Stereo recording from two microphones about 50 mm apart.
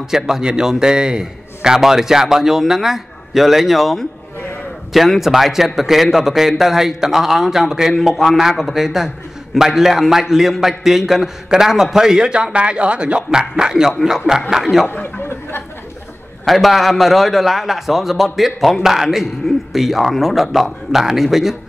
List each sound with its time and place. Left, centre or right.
0.1 s a man's voice: centre
14.9 s a sound: left
16.4 s a man's voice: centre